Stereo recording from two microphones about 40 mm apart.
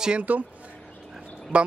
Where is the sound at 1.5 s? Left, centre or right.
Right.